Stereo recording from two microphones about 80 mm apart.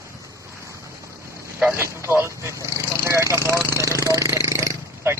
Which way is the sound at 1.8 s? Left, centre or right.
Right.